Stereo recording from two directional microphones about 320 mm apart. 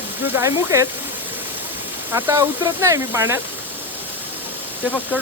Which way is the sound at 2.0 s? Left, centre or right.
Centre.